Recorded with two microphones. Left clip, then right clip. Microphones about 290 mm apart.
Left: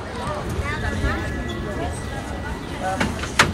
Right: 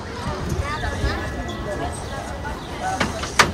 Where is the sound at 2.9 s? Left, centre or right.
Right.